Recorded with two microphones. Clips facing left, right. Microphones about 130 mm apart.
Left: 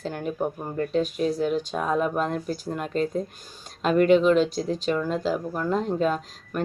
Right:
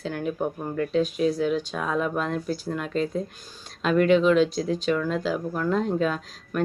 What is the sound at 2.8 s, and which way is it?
Speech, 45° left (ahead or behind).